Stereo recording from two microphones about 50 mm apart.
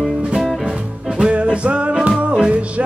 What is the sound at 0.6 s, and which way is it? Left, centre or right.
Music, centre.